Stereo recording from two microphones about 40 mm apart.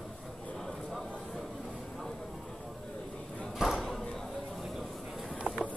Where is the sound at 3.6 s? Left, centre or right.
Centre.